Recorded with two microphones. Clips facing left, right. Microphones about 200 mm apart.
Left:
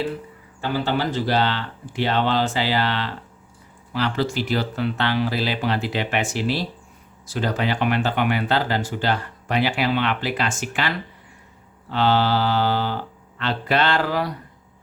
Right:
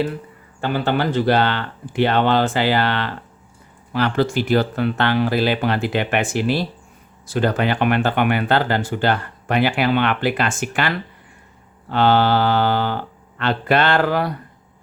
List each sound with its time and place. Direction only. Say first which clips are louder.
0.6 s speech: right 3 dB; 55° right (ahead or behind)